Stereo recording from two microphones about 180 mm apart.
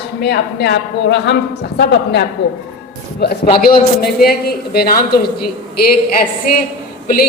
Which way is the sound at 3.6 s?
55° left (ahead or behind).